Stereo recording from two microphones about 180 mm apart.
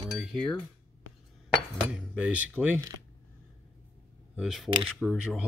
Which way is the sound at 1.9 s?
5° right (ahead or behind).